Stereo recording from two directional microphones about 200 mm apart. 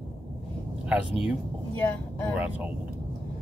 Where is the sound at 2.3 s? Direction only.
5° right (ahead or behind).